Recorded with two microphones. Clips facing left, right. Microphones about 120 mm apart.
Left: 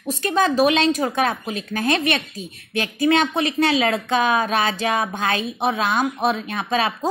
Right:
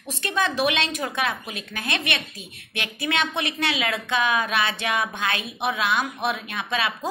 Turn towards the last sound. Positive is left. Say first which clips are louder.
# left 5 dB
turn(degrees=40)  # may be behind; listen again after turning